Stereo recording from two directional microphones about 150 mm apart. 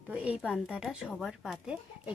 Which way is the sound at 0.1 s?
5° right (ahead or behind).